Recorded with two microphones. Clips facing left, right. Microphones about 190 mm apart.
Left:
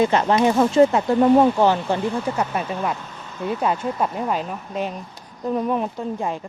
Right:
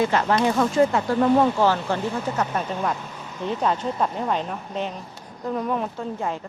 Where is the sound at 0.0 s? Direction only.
20° left (ahead or behind).